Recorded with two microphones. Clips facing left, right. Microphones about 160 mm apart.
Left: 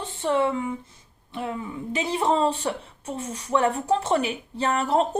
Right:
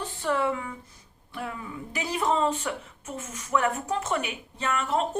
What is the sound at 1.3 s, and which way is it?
Speech, 25° left (ahead or behind).